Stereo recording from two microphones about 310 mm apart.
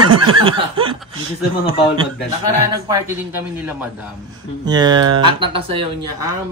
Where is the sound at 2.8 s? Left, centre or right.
Centre.